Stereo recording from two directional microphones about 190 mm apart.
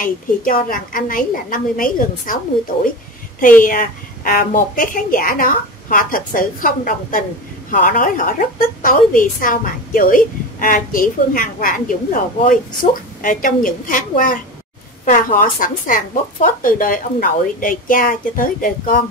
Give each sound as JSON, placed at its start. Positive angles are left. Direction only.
{"t": 0.0, "sound": "a woman's voice", "side_deg": 45}
{"t": 3.6, "sound": "a woman's voice", "side_deg": 45}